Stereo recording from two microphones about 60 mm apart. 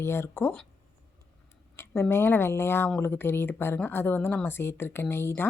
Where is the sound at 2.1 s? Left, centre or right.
Left.